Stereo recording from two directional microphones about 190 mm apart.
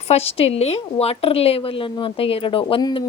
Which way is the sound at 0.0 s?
35° left (ahead or behind).